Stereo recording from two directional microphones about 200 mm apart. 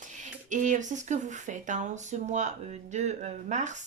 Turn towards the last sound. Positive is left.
turn(degrees=-35)  # may be behind; listen again after turning